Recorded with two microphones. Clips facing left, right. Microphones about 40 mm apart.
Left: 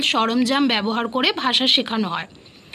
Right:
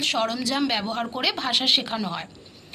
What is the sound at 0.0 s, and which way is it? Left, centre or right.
Speech, left.